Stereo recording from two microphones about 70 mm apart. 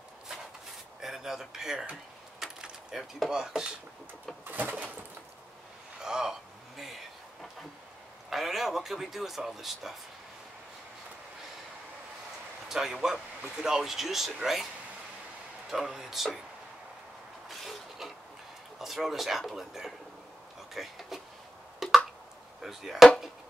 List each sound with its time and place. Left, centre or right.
1.0 s a sound: centre
2.4 s mechanisms: centre
3.3 s speech: centre
4.5 s bird: right
6.0 s speech: centre
8.3 s speech: centre
12.6 s speech: centre
15.7 s speech: centre
17.5 s a sound: centre
18.8 s speech: centre
21.8 s tick: centre
22.6 s speech: centre